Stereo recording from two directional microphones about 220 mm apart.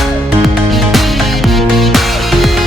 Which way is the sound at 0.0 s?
Centre (ahead or behind).